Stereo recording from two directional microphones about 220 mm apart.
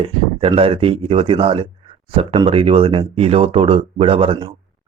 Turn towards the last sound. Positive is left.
turn(degrees=-25)  # may be behind; listen again after turning